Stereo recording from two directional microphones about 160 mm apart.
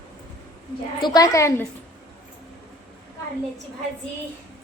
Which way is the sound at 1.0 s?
25° left (ahead or behind).